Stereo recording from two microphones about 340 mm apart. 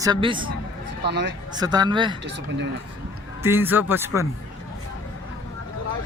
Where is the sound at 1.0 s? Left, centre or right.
Right.